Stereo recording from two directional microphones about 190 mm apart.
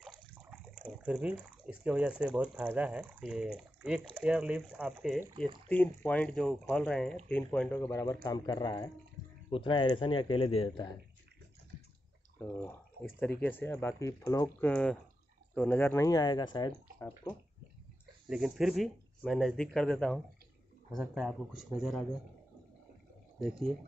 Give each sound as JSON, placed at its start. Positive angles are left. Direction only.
{"t": 0.0, "sound": "water", "side_deg": -5}
{"t": 1.7, "sound": "speech", "side_deg": -5}
{"t": 5.7, "sound": "speech", "side_deg": 10}
{"t": 12.4, "sound": "speech", "side_deg": 10}
{"t": 14.7, "sound": "speech", "side_deg": 5}
{"t": 18.3, "sound": "speech", "side_deg": -5}